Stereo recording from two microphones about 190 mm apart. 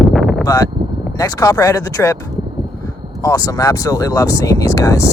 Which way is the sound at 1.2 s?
20° left (ahead or behind).